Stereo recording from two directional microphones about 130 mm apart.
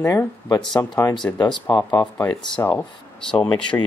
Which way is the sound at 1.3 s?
20° left (ahead or behind).